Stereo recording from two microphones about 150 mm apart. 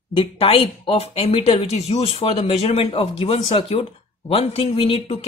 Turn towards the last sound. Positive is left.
turn(degrees=40)  # may be behind; listen again after turning